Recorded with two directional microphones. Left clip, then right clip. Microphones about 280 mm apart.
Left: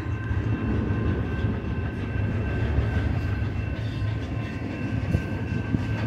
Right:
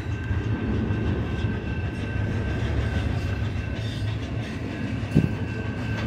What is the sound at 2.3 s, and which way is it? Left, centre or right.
Train, right.